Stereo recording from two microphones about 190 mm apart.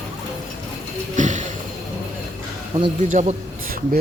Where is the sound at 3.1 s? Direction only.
40° right (ahead or behind).